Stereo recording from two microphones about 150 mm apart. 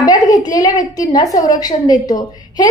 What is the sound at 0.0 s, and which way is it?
A woman's voice, 25° left (ahead or behind).